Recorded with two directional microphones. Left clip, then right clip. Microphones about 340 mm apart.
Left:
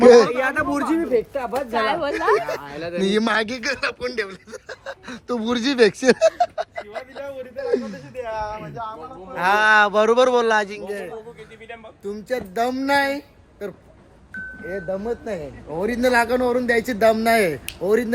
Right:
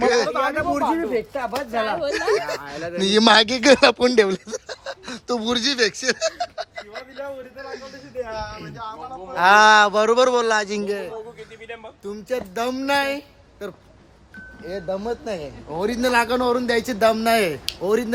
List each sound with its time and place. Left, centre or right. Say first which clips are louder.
0.1 s a man's voice: left 7 dB; centre
1.7 s speech: left 2 dB; centre
8.2 s a sound: left 2 dB; left
8.7 s speech: left 2 dB; centre
9.3 s speech: right 5 dB; right
9.6 s a man's voice: right 1 dB; centre
12.0 s a man's voice: left 1 dB; centre
14.8 s a man's voice: right 1 dB; centre